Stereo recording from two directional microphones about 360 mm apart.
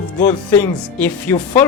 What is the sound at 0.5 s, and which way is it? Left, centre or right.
Speech, centre.